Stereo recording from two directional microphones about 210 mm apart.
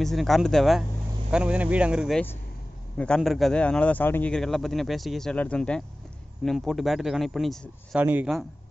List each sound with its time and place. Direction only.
0.0 s speech: centre (ahead or behind)